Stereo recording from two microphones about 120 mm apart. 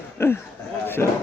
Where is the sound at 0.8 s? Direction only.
20° left (ahead or behind).